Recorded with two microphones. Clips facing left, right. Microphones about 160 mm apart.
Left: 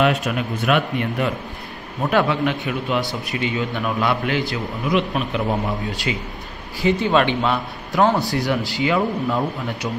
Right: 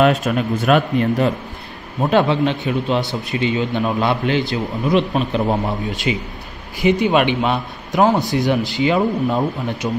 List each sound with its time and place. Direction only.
0.0 s a man's voice: 40° right (ahead or behind)
2.0 s a man's voice: 25° right (ahead or behind)
4.9 s a man's voice: 35° right (ahead or behind)
5.9 s a man's voice: 20° right (ahead or behind)